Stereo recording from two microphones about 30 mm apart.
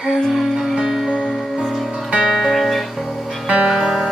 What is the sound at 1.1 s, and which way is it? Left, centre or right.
Music, left.